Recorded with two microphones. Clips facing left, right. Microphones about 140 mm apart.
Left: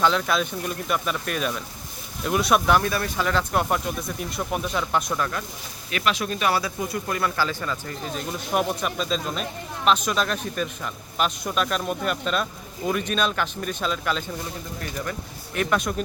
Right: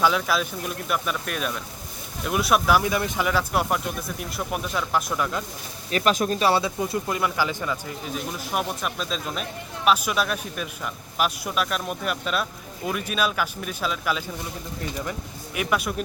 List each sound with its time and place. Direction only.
0.0 s speech: 5° right (ahead or behind)
5.2 s speech: 20° right (ahead or behind)
5.9 s speech: 40° right (ahead or behind); by 14.3 s 5° right (ahead or behind)
15.5 s speech: 5° right (ahead or behind)